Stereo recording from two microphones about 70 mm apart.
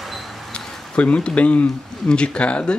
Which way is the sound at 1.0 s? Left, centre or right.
Centre.